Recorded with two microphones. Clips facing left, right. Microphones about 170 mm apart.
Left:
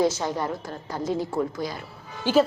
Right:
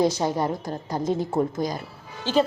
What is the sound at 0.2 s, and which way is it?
Speech, 35° right (ahead or behind).